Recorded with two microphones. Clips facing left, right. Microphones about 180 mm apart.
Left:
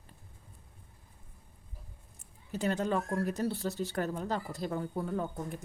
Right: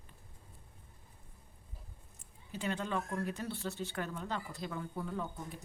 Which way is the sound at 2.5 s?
40° left (ahead or behind).